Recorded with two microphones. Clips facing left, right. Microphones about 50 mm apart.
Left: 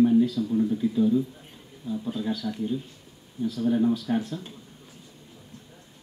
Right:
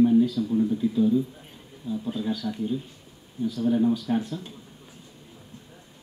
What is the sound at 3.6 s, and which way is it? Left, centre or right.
Speech, centre.